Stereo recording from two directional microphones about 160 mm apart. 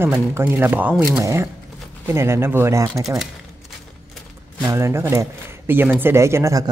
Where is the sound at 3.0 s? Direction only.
Centre (ahead or behind).